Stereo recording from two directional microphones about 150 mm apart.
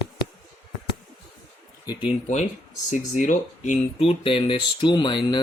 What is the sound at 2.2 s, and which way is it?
Speech, 50° left (ahead or behind).